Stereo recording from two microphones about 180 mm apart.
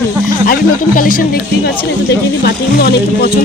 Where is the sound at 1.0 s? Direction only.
50° left (ahead or behind).